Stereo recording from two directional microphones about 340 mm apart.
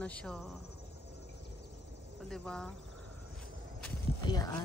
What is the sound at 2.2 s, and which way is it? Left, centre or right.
Speech, centre.